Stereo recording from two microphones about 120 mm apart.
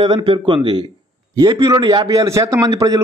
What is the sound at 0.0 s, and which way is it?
A man's voice, 45° right (ahead or behind).